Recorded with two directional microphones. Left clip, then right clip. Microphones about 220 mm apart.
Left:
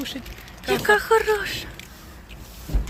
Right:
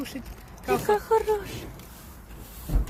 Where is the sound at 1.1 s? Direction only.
Centre (ahead or behind).